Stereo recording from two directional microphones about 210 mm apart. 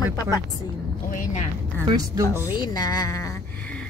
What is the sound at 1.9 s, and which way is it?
Speech, 15° right (ahead or behind).